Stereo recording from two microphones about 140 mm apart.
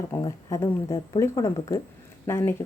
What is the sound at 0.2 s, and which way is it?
Speech, 30° left (ahead or behind).